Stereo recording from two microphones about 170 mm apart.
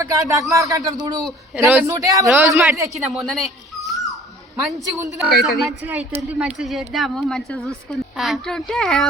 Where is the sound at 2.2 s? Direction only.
5° right (ahead or behind).